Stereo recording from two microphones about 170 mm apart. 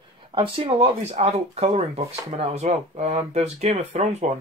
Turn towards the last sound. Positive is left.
turn(degrees=-40)  # may be behind; listen again after turning